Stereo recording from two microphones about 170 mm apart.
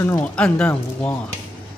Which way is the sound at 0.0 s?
10° left (ahead or behind).